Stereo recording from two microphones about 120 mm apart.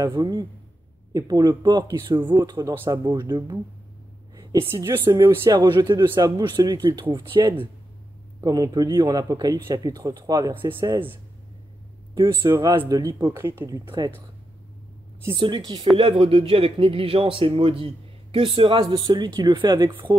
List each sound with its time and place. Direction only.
0.0 s speech: 40° right (ahead or behind)
4.6 s a woman's voice: 20° right (ahead or behind); by 11.0 s 40° right (ahead or behind)
12.4 s a woman's voice: 25° right (ahead or behind)
12.7 s speech: 40° right (ahead or behind)
13.3 s a woman's voice: 20° right (ahead or behind)
13.8 s speech: 40° right (ahead or behind)
15.3 s a man's voice: 40° right (ahead or behind)